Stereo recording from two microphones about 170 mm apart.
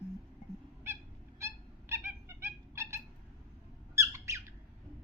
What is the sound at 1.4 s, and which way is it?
Cat, 15° right (ahead or behind).